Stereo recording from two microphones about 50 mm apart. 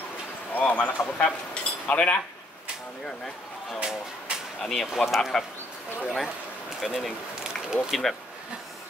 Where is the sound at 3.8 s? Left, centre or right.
Centre.